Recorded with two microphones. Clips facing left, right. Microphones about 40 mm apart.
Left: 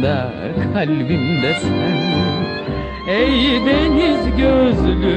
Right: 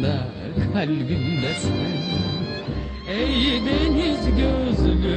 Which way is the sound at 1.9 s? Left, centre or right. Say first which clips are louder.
Left 8 dB; left.